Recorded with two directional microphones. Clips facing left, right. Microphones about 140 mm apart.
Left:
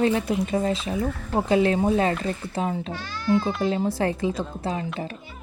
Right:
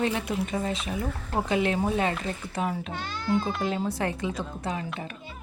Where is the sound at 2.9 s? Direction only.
20° right (ahead or behind).